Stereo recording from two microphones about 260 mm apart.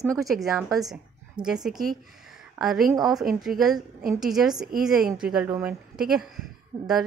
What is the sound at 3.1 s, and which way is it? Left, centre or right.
A woman's voice, centre.